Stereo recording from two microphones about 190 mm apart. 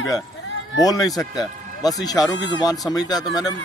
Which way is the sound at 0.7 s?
20° left (ahead or behind).